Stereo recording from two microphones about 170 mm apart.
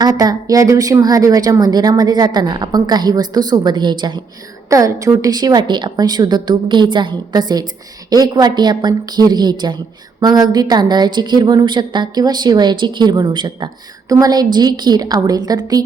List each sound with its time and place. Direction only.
0.0 s a woman's voice: 20° right (ahead or behind)